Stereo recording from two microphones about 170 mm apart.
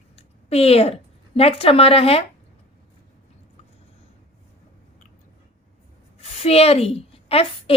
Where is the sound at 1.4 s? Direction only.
35° left (ahead or behind).